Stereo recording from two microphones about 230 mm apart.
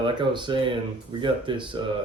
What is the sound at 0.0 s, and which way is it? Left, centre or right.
Speech, centre.